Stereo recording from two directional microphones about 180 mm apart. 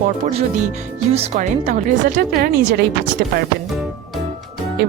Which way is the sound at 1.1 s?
35° right (ahead or behind).